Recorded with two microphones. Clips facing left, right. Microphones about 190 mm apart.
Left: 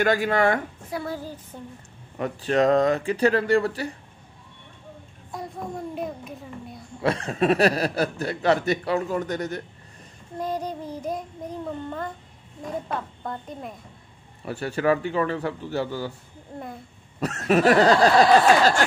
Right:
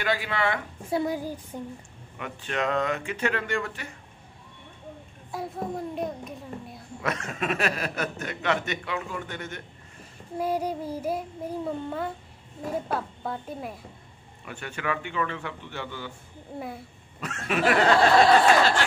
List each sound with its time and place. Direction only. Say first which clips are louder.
0.0 s speech: left 7 dB; 45° left (ahead or behind)
1.0 s child singing: right 3 dB; 15° right (ahead or behind)
2.1 s a man's voice: left 9 dB; 35° left (ahead or behind)
5.3 s a child's voice: right 1 dB; centre (ahead or behind)
7.0 s a man's voice: left 7 dB; 30° left (ahead or behind)
10.3 s child singing: right 2 dB; 10° right (ahead or behind)
12.6 s speech: right 1 dB; 5° right (ahead or behind)
14.4 s a man's voice: left 9 dB; 35° left (ahead or behind)
16.5 s speech: right 1 dB; 5° right (ahead or behind)
17.2 s a man's voice: left 6 dB; 40° left (ahead or behind)